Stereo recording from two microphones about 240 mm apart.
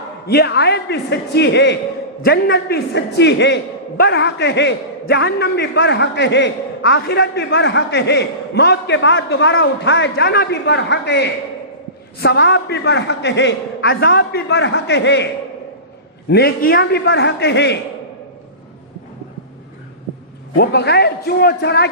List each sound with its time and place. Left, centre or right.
0.3 s a man's voice: left
16.3 s a man's voice: left
20.6 s a man's voice: left